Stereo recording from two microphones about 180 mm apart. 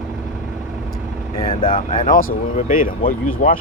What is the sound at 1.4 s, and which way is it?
Speech, 25° left (ahead or behind).